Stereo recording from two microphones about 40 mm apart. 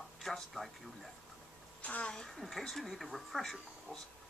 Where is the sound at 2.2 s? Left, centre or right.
Centre.